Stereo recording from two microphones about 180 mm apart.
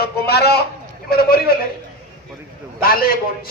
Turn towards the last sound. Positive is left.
turn(degrees=55)  # may be behind; listen again after turning